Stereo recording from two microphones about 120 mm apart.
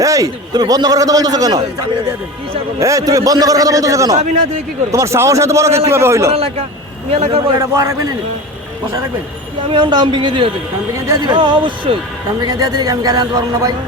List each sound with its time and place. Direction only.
0.0 s a man's voice: 30° right (ahead or behind)
2.8 s a man's voice: 30° right (ahead or behind)
6.3 s speech: 55° right (ahead or behind)
7.6 s a man's voice: 25° right (ahead or behind)
9.6 s a man's voice: 40° right (ahead or behind)